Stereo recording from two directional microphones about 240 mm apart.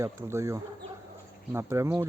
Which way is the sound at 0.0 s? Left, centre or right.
Centre.